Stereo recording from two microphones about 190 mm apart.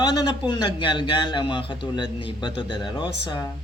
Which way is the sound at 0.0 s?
20° left (ahead or behind).